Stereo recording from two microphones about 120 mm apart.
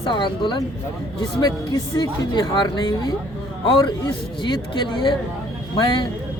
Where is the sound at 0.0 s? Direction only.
40° left (ahead or behind).